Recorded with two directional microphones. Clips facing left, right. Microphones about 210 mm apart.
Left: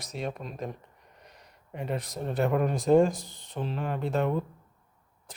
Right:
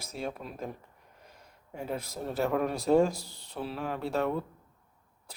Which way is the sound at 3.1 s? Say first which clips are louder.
Left 3 dB; 20° left (ahead or behind).